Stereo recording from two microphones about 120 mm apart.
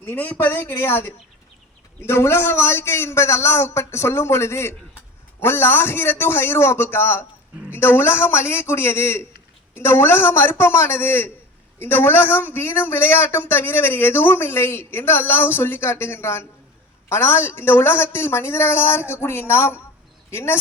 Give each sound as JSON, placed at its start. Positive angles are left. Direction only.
{"t": 0.0, "sound": "a man's voice", "side_deg": 15}